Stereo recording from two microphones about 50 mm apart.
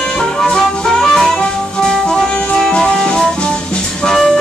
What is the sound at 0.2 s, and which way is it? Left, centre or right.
Music, centre.